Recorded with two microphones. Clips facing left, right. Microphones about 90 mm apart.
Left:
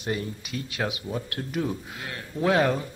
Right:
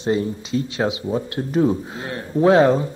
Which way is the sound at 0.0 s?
25° right (ahead or behind).